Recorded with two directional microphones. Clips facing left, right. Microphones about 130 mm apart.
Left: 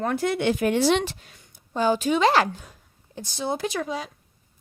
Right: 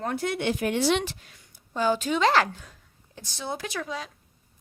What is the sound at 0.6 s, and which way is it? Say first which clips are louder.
Speech: left 3 dB; 40° left (ahead or behind).